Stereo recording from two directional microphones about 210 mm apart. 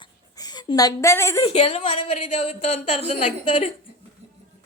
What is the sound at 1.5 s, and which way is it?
A woman's voice, 30° left (ahead or behind).